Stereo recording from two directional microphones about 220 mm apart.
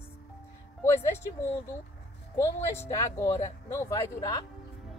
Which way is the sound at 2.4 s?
15° left (ahead or behind).